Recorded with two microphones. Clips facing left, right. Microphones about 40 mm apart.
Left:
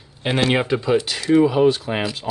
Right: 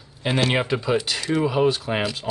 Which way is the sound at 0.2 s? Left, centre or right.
Centre.